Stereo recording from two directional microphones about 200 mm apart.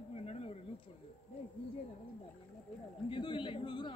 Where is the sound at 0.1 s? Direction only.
30° left (ahead or behind).